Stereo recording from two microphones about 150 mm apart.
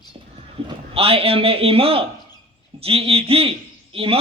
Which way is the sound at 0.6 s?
40° right (ahead or behind).